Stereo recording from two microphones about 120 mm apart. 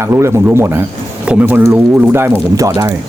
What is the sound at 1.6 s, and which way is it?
Speech, 25° right (ahead or behind).